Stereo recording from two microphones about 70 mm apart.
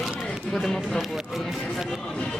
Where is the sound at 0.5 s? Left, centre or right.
Centre.